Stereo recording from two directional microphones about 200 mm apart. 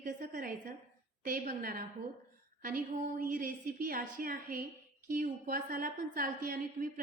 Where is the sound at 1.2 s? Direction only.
45° right (ahead or behind).